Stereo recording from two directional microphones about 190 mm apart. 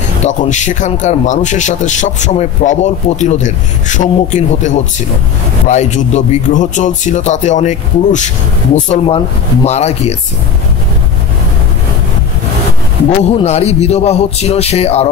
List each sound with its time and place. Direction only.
0.2 s a man's voice: 40° left (ahead or behind)
13.3 s a man's voice: 35° left (ahead or behind)